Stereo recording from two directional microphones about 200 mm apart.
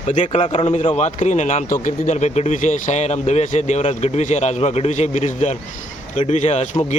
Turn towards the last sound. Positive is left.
turn(degrees=35)  # may be behind; listen again after turning